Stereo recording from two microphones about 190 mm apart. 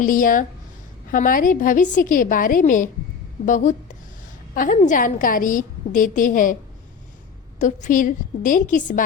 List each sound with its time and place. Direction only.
0.0 s a woman's voice: 45° left (ahead or behind)
7.6 s a woman's voice: 40° left (ahead or behind)